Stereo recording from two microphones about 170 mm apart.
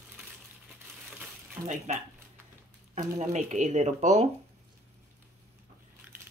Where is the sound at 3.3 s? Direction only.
45° right (ahead or behind).